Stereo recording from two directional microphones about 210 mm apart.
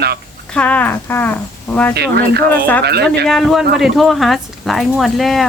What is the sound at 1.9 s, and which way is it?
Speech, 50° right (ahead or behind).